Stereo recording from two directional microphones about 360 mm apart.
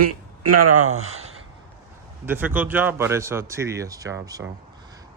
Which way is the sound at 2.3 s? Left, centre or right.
Centre.